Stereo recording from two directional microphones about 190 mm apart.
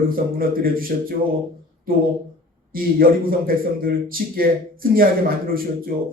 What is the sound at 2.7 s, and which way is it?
Speech, 50° right (ahead or behind).